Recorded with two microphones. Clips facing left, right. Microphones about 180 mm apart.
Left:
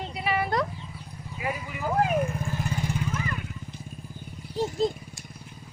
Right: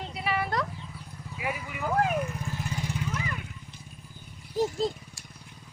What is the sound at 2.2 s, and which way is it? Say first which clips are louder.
Vehicle: left 4 dB; 55° left (ahead or behind).